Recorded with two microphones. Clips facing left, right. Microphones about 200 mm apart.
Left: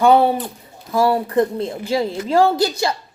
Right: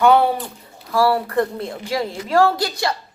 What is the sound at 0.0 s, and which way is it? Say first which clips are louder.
A woman's voice: left 1 dB; 25° left (ahead or behind).